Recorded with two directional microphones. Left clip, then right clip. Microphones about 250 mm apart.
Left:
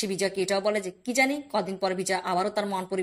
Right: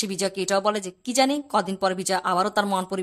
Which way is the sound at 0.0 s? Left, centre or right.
Centre.